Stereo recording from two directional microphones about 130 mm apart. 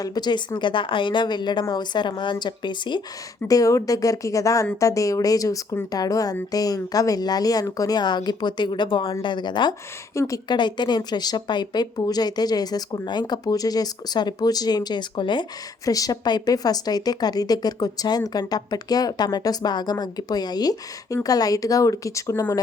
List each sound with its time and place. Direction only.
0.0 s speech: 30° left (ahead or behind)
3.4 s speech: 25° left (ahead or behind)